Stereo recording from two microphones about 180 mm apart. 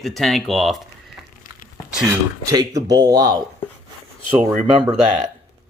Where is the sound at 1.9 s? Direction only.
5° right (ahead or behind).